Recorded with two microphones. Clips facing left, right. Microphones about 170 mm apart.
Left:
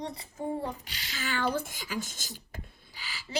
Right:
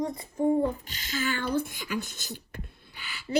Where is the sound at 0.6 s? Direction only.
45° right (ahead or behind).